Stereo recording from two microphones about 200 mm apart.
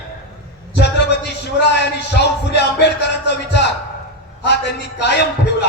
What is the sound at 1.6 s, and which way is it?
Music, 60° left (ahead or behind).